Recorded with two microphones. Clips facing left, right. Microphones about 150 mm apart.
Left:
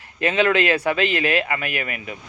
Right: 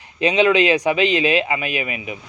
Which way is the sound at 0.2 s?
15° right (ahead or behind).